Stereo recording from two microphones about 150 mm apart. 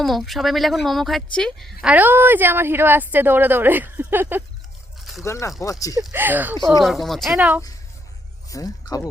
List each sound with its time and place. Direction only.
0.0 s speech: centre (ahead or behind)
5.2 s speech: 20° left (ahead or behind)
6.1 s speech: 15° right (ahead or behind)
6.8 s speech: centre (ahead or behind)
7.3 s speech: 10° right (ahead or behind)
8.4 s speech: 25° left (ahead or behind)